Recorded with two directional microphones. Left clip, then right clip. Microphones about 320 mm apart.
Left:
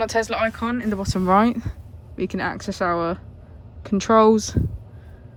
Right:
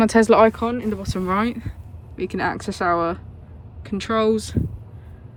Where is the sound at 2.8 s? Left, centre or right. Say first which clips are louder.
Right 2 dB; centre.